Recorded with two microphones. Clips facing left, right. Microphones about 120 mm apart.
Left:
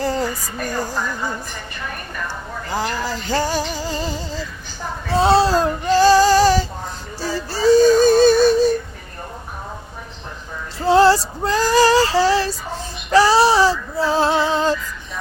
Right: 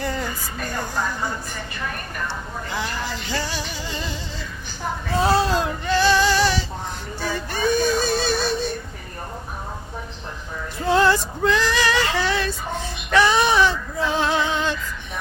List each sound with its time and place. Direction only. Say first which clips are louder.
0.0 s a sound: left 6 dB; 35° left (ahead or behind)
2.6 s music: left 6 dB; 40° left (ahead or behind)
5.1 s female singing: left 5 dB; 30° left (ahead or behind)
7.2 s music: left 3 dB; 35° left (ahead or behind)
10.8 s female singing: left 5 dB; 30° left (ahead or behind)